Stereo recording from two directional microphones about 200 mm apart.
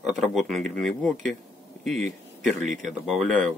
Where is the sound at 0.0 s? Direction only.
Centre (ahead or behind).